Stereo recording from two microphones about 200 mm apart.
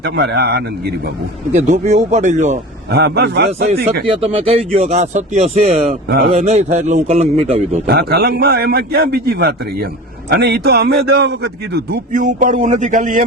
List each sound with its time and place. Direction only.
0.0 s a man's voice: 55° right (ahead or behind)
1.5 s speech: 35° right (ahead or behind)
2.9 s a man's voice: 55° right (ahead or behind)
4.0 s speech: 30° right (ahead or behind)
5.9 s a man's voice: 50° right (ahead or behind)
6.4 s speech: 35° right (ahead or behind)
7.9 s a man's voice: 50° right (ahead or behind)